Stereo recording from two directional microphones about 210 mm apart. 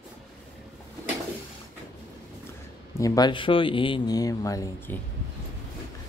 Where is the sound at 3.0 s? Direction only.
20° left (ahead or behind).